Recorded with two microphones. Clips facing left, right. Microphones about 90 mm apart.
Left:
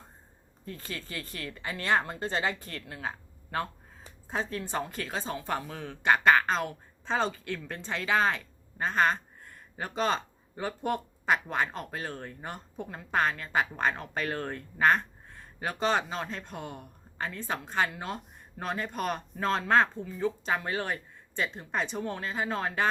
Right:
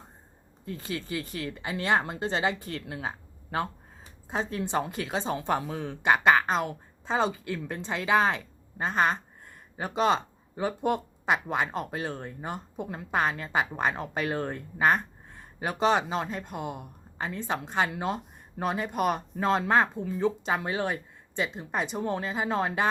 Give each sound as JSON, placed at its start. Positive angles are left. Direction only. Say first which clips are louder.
{"t": 0.6, "sound": "speech", "louder": "right 5 dB", "side_deg": -20}